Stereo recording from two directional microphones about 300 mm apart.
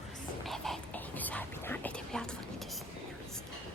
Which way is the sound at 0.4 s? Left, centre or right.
Centre.